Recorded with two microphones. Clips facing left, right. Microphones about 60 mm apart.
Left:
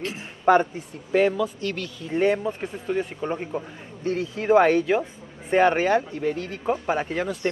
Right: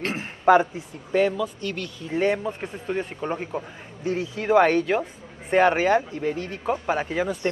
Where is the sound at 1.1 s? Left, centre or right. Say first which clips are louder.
Left 1 dB; centre.